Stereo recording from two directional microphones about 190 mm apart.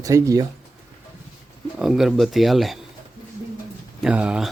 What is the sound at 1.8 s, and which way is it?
Speech, centre (ahead or behind).